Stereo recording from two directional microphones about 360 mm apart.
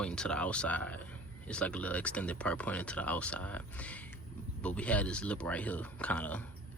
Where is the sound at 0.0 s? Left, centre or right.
Centre.